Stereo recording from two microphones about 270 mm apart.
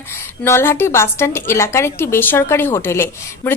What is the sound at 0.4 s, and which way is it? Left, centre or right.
A woman's voice, centre.